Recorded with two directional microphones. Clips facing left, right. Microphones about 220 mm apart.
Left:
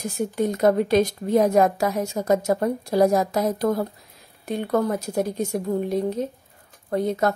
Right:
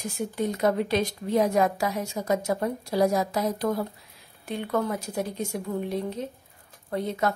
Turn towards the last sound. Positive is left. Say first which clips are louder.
# left 5 dB
turn(degrees=45)  # may be behind; listen again after turning